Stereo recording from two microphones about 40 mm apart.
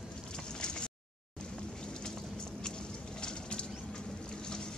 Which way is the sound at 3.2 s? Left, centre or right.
Left.